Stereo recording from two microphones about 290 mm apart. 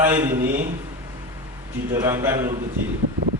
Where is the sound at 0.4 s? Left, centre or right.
Right.